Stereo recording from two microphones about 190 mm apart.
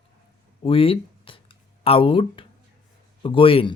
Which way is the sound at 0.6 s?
30° left (ahead or behind).